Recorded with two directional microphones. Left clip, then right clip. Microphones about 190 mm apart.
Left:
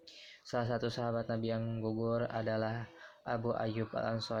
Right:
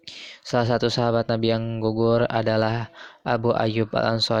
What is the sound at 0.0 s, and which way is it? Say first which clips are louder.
Speech: right 15 dB; 35° right (ahead or behind).